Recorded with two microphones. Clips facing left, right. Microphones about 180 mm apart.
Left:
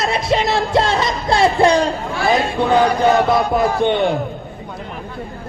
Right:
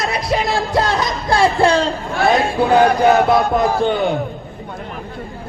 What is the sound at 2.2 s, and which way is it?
Chant, centre (ahead or behind).